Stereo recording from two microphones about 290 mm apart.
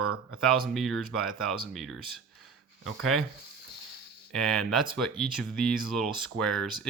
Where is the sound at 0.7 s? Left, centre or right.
Centre.